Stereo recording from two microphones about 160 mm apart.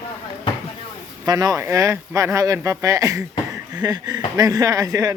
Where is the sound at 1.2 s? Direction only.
25° right (ahead or behind).